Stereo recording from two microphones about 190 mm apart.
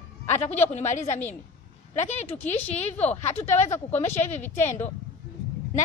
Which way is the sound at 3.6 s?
15° left (ahead or behind).